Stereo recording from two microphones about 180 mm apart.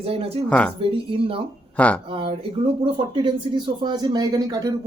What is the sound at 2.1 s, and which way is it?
A man's voice, 30° right (ahead or behind).